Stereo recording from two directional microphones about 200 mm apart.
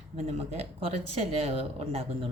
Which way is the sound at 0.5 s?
30° right (ahead or behind).